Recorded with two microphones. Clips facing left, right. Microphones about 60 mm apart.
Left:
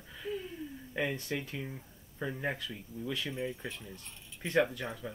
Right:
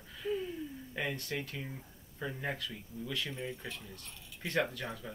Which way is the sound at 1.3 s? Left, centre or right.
Centre.